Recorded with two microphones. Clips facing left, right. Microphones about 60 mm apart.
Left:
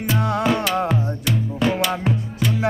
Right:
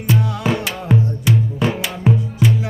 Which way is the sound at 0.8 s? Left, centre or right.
Centre.